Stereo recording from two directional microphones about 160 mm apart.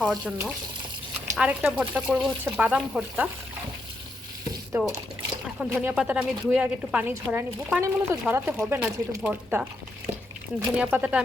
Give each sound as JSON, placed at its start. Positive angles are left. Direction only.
{"t": 0.0, "sound": "speech", "side_deg": -5}
{"t": 4.7, "sound": "speech", "side_deg": -10}
{"t": 10.8, "sound": "speech", "side_deg": -10}